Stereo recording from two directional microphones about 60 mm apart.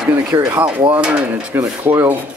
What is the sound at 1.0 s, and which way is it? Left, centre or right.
Speech, right.